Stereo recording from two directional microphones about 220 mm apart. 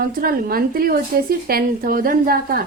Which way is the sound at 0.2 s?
40° right (ahead or behind).